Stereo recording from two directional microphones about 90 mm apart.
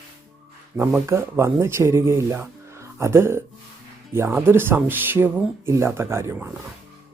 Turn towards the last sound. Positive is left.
turn(degrees=-30)  # may be behind; listen again after turning